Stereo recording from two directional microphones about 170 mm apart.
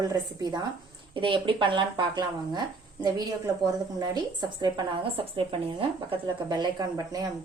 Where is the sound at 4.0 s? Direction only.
25° right (ahead or behind).